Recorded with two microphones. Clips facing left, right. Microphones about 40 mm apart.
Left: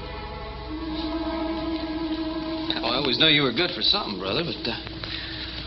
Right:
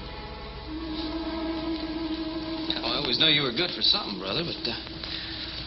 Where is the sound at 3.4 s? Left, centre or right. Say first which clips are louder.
Left 3 dB; centre.